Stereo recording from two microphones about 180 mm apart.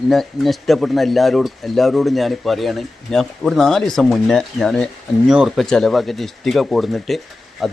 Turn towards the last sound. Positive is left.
turn(degrees=0)  # may be behind; listen again after turning